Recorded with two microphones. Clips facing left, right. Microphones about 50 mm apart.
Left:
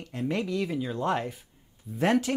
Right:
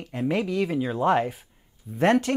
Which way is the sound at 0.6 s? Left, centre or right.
Right.